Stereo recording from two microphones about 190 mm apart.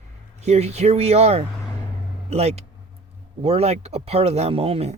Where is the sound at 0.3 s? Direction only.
35° right (ahead or behind).